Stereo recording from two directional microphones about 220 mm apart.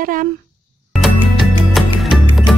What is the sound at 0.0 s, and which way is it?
Speech, 40° right (ahead or behind).